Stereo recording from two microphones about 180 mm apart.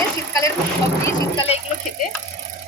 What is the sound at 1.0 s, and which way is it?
Vehicle, 20° left (ahead or behind).